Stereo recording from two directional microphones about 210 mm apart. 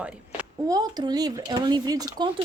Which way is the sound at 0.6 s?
20° right (ahead or behind).